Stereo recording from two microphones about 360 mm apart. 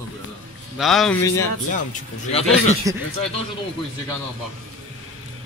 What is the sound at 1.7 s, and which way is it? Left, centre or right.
Speech, centre.